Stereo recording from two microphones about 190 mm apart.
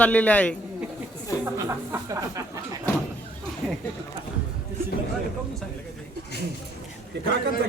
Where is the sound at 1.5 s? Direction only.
15° right (ahead or behind).